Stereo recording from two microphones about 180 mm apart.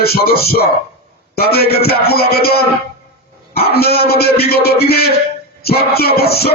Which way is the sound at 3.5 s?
60° left (ahead or behind).